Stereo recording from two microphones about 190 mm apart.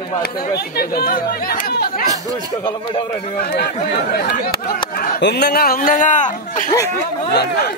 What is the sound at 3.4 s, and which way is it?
Speech, 55° left (ahead or behind).